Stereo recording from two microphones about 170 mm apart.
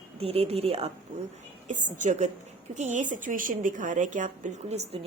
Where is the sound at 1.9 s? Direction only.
45° right (ahead or behind).